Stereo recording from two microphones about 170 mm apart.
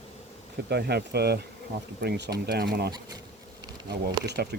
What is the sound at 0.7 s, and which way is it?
Speech, 75° right (ahead or behind).